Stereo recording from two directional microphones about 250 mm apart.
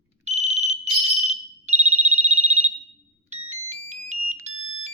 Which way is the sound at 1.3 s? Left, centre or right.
Right.